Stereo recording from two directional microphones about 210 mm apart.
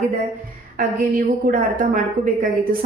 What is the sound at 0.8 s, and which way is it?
A woman's voice, 40° right (ahead or behind).